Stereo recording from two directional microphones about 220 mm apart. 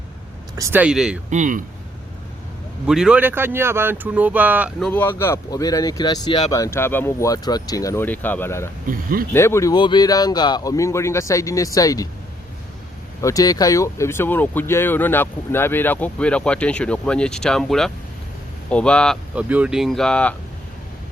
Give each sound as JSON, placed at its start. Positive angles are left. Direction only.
{"t": 0.5, "sound": "speech", "side_deg": -10}
{"t": 1.3, "sound": "speech", "side_deg": -35}
{"t": 2.8, "sound": "speech", "side_deg": -5}
{"t": 4.9, "sound": "speech", "side_deg": 10}
{"t": 8.9, "sound": "speech", "side_deg": -40}
{"t": 9.3, "sound": "speech", "side_deg": 10}
{"t": 13.2, "sound": "speech", "side_deg": 15}